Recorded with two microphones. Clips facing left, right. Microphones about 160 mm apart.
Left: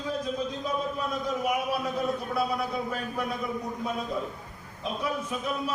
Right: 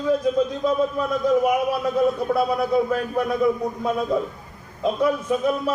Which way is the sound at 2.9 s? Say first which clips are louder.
Right 9 dB; 55° right (ahead or behind).